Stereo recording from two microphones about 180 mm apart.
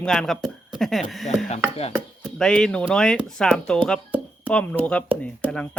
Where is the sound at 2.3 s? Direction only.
5° left (ahead or behind).